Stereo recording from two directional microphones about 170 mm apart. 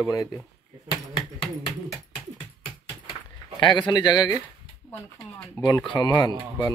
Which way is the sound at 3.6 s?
25° left (ahead or behind).